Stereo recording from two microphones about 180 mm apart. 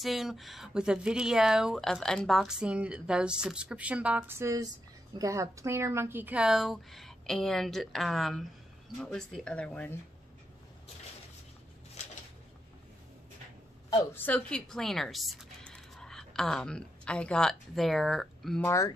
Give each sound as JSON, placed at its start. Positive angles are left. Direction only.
{"t": 0.0, "sound": "speech", "side_deg": 0}
{"t": 14.1, "sound": "speech", "side_deg": 10}
{"t": 18.6, "sound": "speech", "side_deg": 15}